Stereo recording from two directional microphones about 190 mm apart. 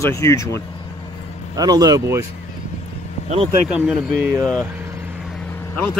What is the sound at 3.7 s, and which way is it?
Speech, 5° right (ahead or behind).